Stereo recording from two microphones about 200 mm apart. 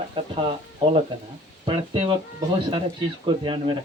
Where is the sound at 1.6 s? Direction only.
30° right (ahead or behind).